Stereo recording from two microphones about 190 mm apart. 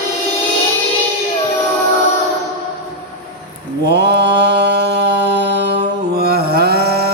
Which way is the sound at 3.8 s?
60° right (ahead or behind).